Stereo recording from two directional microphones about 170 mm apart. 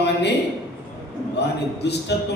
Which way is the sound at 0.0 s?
85° left.